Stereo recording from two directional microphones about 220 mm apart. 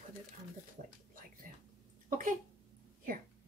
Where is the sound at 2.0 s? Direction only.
40° right (ahead or behind).